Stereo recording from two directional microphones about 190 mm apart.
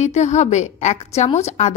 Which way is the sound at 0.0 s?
35° left (ahead or behind).